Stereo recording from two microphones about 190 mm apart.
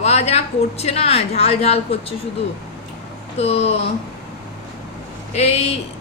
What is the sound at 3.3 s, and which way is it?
Speech, 30° left (ahead or behind).